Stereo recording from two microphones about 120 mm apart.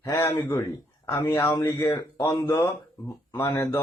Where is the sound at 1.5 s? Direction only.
35° left (ahead or behind).